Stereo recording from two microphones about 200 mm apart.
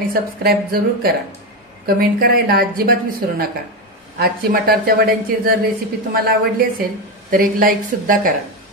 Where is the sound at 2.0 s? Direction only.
50° right (ahead or behind).